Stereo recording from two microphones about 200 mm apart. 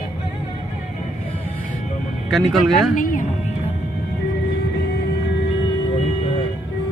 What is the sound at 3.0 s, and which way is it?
Speech, 40° left (ahead or behind).